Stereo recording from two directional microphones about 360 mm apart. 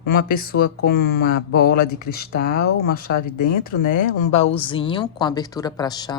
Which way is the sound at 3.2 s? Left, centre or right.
Left.